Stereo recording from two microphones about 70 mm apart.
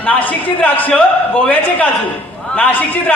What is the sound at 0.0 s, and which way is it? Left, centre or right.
A man's voice, left.